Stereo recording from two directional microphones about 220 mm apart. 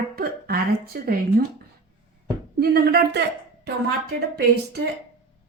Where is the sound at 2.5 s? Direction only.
45° right (ahead or behind).